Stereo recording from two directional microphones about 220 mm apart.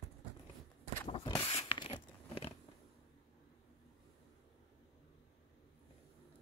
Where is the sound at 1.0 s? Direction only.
20° left (ahead or behind).